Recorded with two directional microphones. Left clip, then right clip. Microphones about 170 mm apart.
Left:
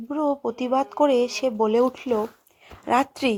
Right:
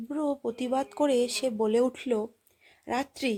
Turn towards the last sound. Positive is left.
turn(degrees=5)  # may be behind; listen again after turning